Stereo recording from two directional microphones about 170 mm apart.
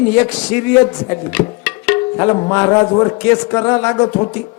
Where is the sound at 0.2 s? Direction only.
5° left (ahead or behind).